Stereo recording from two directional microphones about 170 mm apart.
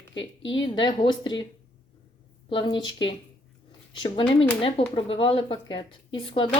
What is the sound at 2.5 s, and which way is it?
Speech, 25° left (ahead or behind).